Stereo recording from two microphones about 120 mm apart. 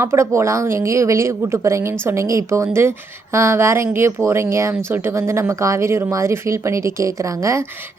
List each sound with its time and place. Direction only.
0.0 s speech: 20° right (ahead or behind)